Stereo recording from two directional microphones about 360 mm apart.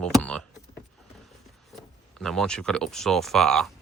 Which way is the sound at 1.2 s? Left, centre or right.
Centre.